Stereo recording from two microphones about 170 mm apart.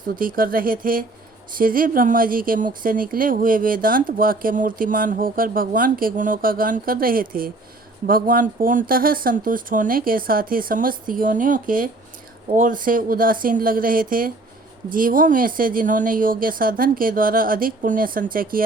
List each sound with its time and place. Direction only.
0.2 s speech: 55° right (ahead or behind)